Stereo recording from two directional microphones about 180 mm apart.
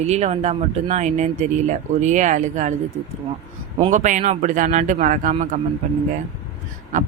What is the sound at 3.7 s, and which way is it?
Speech, 40° right (ahead or behind).